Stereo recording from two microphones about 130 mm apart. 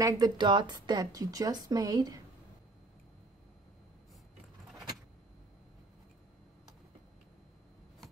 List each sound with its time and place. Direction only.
0.0 s speech: 35° right (ahead or behind)